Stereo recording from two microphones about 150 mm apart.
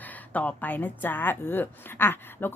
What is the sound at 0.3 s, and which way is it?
A woman's voice, 10° left (ahead or behind).